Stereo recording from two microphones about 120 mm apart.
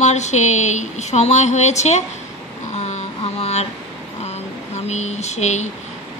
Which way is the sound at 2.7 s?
65° left (ahead or behind).